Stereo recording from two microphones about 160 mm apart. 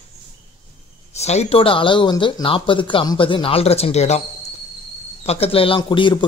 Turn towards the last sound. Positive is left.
turn(degrees=30)  # may be behind; listen again after turning